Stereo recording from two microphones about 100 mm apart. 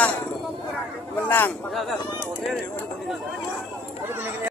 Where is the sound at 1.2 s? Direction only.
20° left (ahead or behind).